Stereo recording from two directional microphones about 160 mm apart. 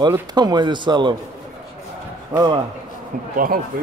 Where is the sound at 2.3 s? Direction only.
20° right (ahead or behind).